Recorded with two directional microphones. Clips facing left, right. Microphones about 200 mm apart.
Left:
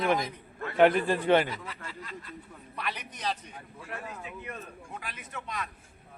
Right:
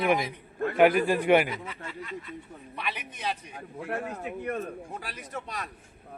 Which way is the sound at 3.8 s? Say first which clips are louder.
Right 8 dB; 60° right (ahead or behind).